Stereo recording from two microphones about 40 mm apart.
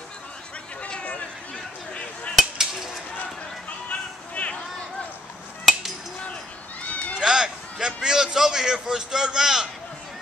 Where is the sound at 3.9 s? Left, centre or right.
Left.